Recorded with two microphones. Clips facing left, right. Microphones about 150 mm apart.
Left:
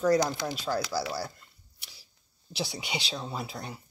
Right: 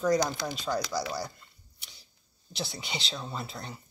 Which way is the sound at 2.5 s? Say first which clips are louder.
Left 3 dB; 10° left (ahead or behind).